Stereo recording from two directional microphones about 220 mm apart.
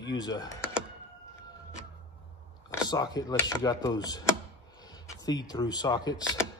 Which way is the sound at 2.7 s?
15° left (ahead or behind).